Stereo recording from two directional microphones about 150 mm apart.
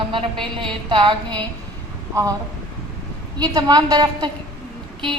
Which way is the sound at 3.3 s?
25° right (ahead or behind).